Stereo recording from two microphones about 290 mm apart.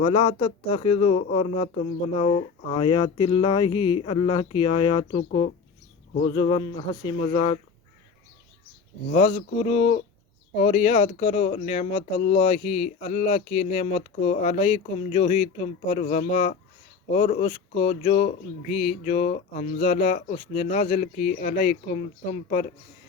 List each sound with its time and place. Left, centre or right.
0.0 s speech: centre
9.1 s speech: left